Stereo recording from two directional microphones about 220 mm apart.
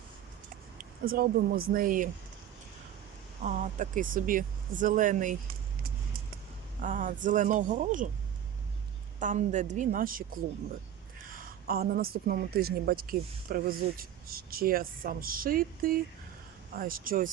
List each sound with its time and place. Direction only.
1.1 s speech: 45° right (ahead or behind)
3.4 s speech: 35° right (ahead or behind)
6.8 s speech: 35° right (ahead or behind)
9.2 s speech: 35° right (ahead or behind)